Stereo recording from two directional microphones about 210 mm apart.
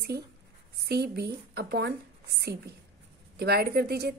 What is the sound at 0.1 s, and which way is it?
A woman's voice, 50° right (ahead or behind).